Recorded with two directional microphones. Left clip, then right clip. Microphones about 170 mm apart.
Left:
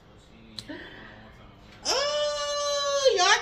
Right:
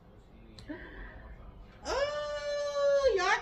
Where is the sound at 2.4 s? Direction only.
15° left (ahead or behind).